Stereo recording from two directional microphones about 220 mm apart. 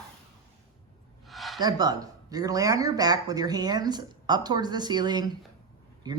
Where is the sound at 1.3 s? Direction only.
Centre (ahead or behind).